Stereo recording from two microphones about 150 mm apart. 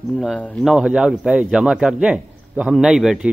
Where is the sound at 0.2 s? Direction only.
5° left (ahead or behind).